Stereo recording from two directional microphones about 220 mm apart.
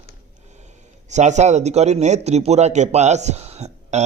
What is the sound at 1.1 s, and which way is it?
A man's voice, 30° right (ahead or behind).